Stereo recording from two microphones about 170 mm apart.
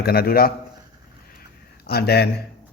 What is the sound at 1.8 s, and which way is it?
Speech, 70° left (ahead or behind).